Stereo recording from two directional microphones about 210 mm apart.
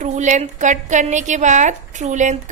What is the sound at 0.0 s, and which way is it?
A woman's voice, 35° right (ahead or behind).